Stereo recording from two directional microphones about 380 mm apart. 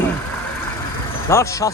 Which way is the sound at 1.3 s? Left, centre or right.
Centre.